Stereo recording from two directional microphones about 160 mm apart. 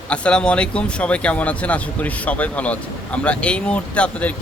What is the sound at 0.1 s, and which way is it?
Speech, 5° left (ahead or behind).